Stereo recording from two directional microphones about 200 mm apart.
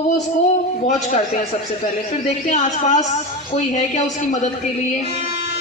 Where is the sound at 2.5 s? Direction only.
35° left (ahead or behind).